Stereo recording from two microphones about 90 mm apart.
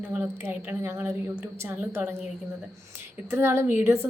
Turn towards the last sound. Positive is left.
turn(degrees=-30)  # may be behind; listen again after turning